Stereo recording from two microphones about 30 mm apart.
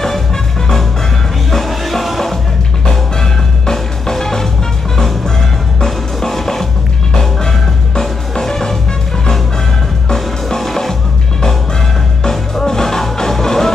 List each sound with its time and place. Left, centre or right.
1.5 s music: centre
3.7 s music: centre
5.9 s music: centre
7.2 s music: centre
10.0 s music: centre
12.3 s music: centre